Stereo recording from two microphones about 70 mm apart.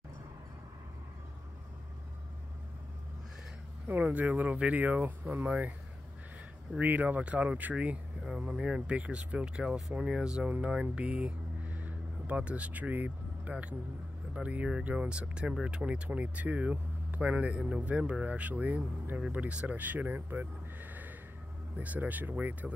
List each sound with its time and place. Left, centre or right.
3.8 s speech: right
6.8 s speech: right
21.7 s speech: right